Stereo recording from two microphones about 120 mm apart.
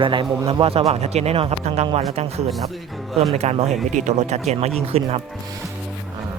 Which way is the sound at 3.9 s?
75° right (ahead or behind).